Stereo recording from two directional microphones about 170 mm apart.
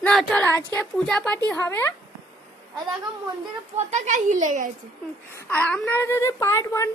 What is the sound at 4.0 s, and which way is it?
Speech, 45° right (ahead or behind).